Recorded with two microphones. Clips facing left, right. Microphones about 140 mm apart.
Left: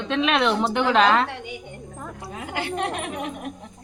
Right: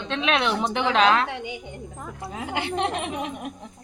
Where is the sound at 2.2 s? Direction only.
25° right (ahead or behind).